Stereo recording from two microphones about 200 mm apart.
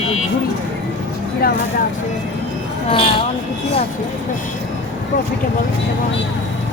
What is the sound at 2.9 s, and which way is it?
Speech, 25° left (ahead or behind).